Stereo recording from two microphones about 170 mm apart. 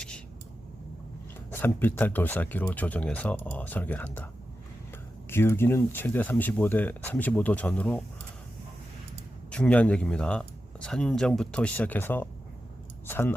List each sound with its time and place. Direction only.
1.5 s speech: 10° left (ahead or behind)
5.3 s speech: 15° left (ahead or behind)
9.5 s speech: 5° left (ahead or behind)